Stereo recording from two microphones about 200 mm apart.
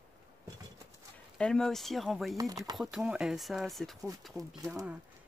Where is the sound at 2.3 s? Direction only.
20° right (ahead or behind).